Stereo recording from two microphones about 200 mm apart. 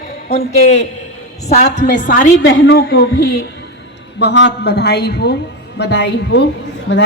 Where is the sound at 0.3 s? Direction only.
65° left (ahead or behind).